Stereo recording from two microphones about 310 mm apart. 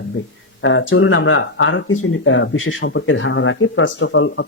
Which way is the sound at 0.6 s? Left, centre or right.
Left.